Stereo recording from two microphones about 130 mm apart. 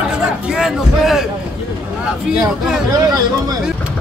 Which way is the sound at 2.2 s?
5° right (ahead or behind).